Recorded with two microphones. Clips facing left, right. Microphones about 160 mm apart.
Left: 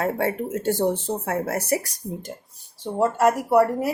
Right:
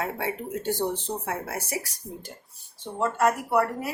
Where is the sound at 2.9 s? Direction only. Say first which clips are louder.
Left 4 dB; 35° left (ahead or behind).